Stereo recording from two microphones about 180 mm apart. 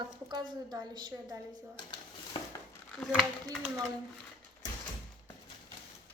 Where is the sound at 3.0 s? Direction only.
Centre (ahead or behind).